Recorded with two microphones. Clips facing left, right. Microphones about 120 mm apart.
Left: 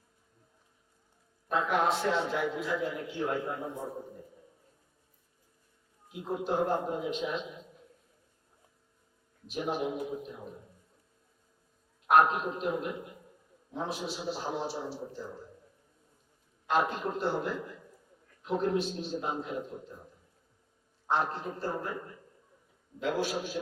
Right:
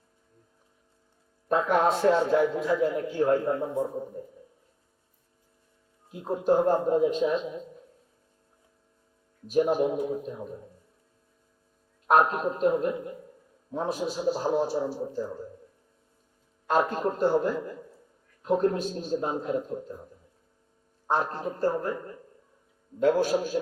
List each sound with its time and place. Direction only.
1.5 s a man's voice: 40° right (ahead or behind)
6.1 s a man's voice: 40° right (ahead or behind)
9.5 s a man's voice: 45° right (ahead or behind)
12.0 s a man's voice: 40° right (ahead or behind)
13.9 s a man's voice: 45° right (ahead or behind)
16.6 s a man's voice: 45° right (ahead or behind)
21.1 s a man's voice: 45° right (ahead or behind)
23.0 s a man's voice: 45° right (ahead or behind)